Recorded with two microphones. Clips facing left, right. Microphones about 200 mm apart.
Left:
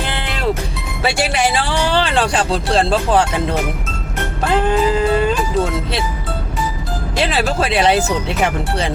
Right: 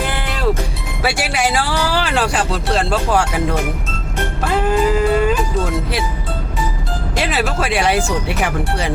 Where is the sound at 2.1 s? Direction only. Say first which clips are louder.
Left 1 dB; 5° right (ahead or behind).